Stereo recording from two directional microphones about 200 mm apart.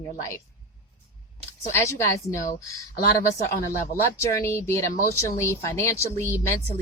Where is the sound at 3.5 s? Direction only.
40° left (ahead or behind).